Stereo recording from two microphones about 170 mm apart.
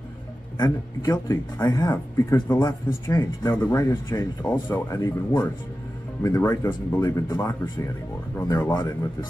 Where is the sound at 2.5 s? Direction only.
25° left (ahead or behind).